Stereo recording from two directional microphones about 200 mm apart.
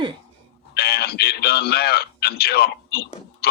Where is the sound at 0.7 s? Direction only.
50° left (ahead or behind).